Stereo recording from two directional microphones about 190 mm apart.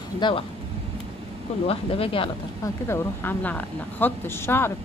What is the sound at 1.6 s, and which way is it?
Speech, 30° left (ahead or behind).